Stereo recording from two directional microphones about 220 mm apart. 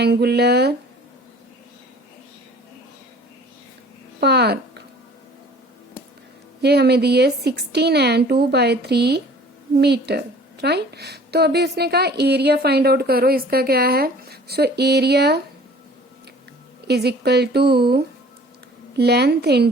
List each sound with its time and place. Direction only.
0.0 s a woman's voice: 50° right (ahead or behind)
4.2 s speech: 45° right (ahead or behind)
6.6 s a woman's voice: 50° right (ahead or behind)
16.8 s a woman's voice: 50° right (ahead or behind)